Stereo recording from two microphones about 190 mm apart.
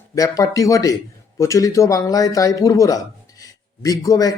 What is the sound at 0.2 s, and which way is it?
Speech, 20° left (ahead or behind).